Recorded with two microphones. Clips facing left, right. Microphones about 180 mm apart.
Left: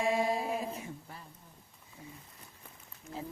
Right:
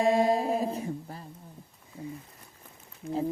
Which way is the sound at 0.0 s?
40° right (ahead or behind).